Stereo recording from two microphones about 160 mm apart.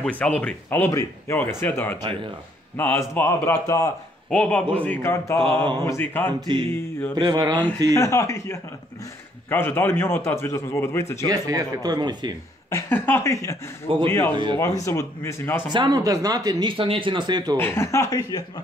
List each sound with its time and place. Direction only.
0.0 s a man's voice: 10° left (ahead or behind)
4.3 s a man's voice: 5° left (ahead or behind)
6.4 s speech: 30° right (ahead or behind)
7.9 s a man's voice: 20° left (ahead or behind)
11.2 s speech: 25° right (ahead or behind)
12.6 s a man's voice: 15° left (ahead or behind)
14.3 s speech: 30° right (ahead or behind)
14.9 s a man's voice: 15° left (ahead or behind)
15.7 s speech: 25° right (ahead or behind)
17.6 s speech: 15° left (ahead or behind)